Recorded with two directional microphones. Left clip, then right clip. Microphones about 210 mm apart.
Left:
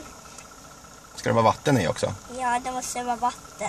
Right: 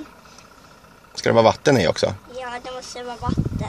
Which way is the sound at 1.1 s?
40° right (ahead or behind).